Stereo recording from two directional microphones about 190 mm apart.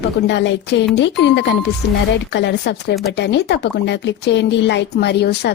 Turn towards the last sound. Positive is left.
turn(degrees=60)  # may be behind; listen again after turning